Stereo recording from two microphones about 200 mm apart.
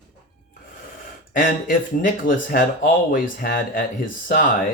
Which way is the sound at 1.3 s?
40° left (ahead or behind).